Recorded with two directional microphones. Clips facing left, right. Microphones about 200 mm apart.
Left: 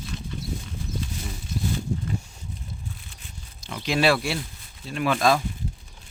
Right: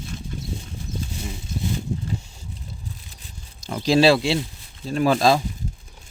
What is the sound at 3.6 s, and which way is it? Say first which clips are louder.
Speech: right 6 dB; 35° right (ahead or behind).